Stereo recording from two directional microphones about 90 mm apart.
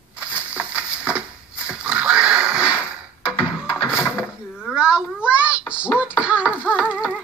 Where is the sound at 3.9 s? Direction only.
10° right (ahead or behind).